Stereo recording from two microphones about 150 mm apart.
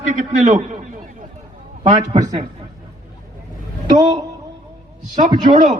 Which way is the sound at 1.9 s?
50° right (ahead or behind).